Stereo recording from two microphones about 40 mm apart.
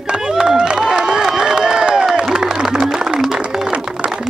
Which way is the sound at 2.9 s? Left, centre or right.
Right.